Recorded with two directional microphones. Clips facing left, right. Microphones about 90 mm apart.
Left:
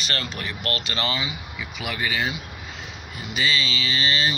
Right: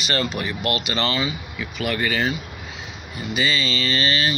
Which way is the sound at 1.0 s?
10° left (ahead or behind).